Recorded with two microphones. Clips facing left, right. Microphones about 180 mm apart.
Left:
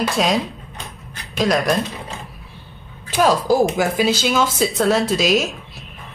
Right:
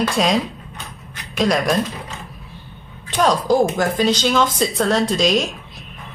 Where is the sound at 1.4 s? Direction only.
Centre (ahead or behind).